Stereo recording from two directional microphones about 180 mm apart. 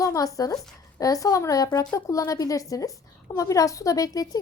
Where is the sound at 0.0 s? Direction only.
20° left (ahead or behind).